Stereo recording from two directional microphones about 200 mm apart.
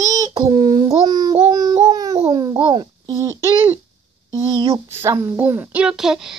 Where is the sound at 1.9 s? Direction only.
20° right (ahead or behind).